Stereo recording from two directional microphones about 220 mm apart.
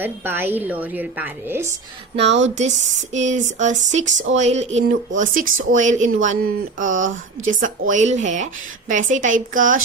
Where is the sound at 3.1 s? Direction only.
30° right (ahead or behind).